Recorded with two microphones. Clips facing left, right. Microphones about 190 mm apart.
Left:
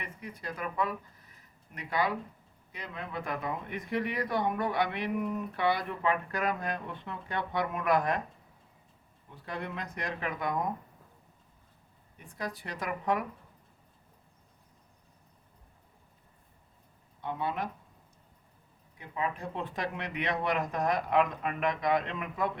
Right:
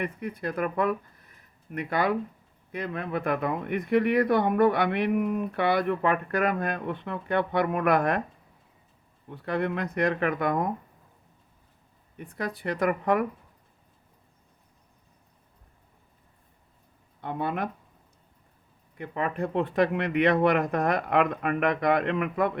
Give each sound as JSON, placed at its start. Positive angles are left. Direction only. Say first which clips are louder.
{"t": 0.0, "sound": "speech", "louder": "right 10 dB", "side_deg": -55}
{"t": 9.3, "sound": "speech", "louder": "right 10 dB", "side_deg": -65}
{"t": 12.1, "sound": "speech", "louder": "right 5 dB", "side_deg": -60}
{"t": 17.2, "sound": "speech", "louder": "right 4 dB", "side_deg": -55}
{"t": 18.9, "sound": "speech", "louder": "right 5 dB", "side_deg": -60}